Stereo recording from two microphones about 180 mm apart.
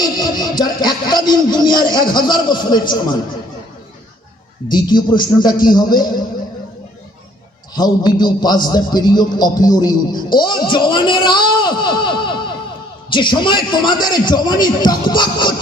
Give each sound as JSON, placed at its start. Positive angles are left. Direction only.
{"t": 0.2, "sound": "speech", "side_deg": 20}
{"t": 4.7, "sound": "speech", "side_deg": 25}
{"t": 7.8, "sound": "a man's voice", "side_deg": 25}